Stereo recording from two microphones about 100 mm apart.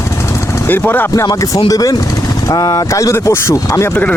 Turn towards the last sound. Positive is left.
turn(degrees=30)  # may be behind; listen again after turning